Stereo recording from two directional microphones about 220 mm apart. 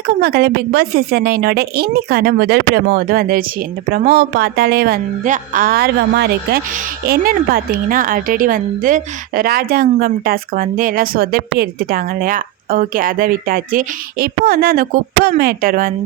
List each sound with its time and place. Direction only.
0.1 s a woman's voice: 45° right (ahead or behind)